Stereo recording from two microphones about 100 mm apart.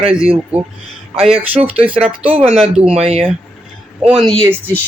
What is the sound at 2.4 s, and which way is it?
Speech, 85° right.